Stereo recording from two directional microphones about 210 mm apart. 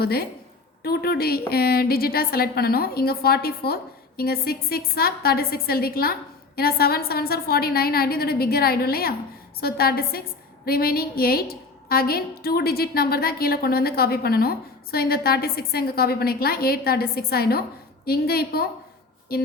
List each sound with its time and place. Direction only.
0.0 s a woman's voice: 45° left (ahead or behind)